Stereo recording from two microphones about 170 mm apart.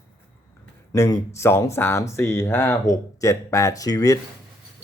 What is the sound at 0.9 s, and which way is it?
Speech, 20° left (ahead or behind).